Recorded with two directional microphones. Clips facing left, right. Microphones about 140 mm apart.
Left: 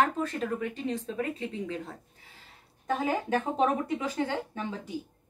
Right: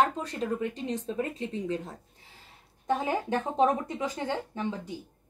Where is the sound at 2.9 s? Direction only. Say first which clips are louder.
Even; 20° right (ahead or behind).